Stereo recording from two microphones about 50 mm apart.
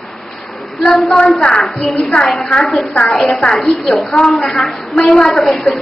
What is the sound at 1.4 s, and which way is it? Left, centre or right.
A woman's voice, centre.